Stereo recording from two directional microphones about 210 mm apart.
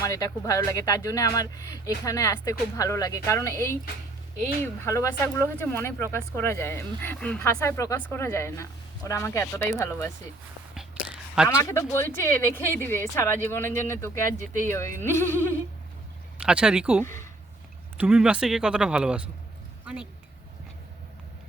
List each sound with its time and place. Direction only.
0.0 s speech: 15° left (ahead or behind)
11.4 s speech: 15° left (ahead or behind)
16.4 s speech: 5° right (ahead or behind)
17.0 s speech: 10° left (ahead or behind)
17.9 s speech: 5° right (ahead or behind)